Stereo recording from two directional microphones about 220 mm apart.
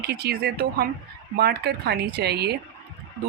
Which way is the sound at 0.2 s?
45° right (ahead or behind).